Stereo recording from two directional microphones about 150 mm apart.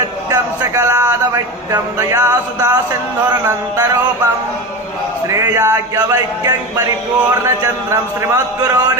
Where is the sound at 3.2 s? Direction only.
15° right (ahead or behind).